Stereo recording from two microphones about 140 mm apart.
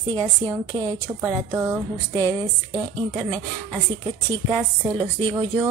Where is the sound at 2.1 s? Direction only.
30° right (ahead or behind).